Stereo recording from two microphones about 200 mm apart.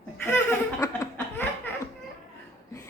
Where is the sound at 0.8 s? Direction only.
15° left (ahead or behind).